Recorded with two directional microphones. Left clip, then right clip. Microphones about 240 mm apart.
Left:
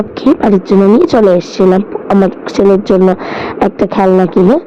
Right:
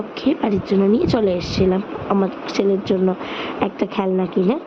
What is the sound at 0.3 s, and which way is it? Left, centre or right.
Speech, left.